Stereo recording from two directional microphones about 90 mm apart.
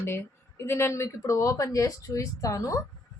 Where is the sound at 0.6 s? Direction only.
30° left (ahead or behind).